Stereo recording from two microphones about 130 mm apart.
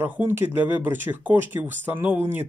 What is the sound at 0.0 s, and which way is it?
Speech, 15° right (ahead or behind).